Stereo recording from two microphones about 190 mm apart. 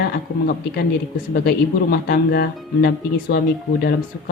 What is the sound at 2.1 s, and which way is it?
Speech, 55° left (ahead or behind).